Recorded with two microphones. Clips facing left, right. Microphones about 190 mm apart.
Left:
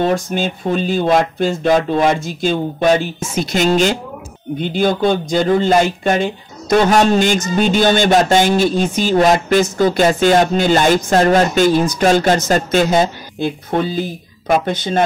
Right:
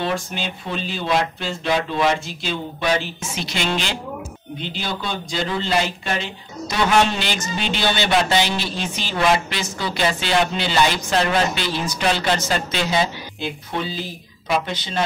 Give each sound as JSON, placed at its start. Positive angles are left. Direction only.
{"t": 0.0, "sound": "a man's voice", "side_deg": 45}